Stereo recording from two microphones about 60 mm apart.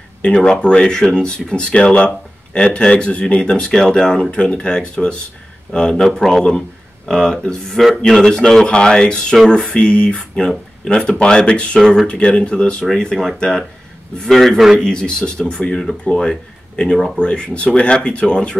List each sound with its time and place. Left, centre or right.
0.2 s a man's voice: centre
14.8 s speech: centre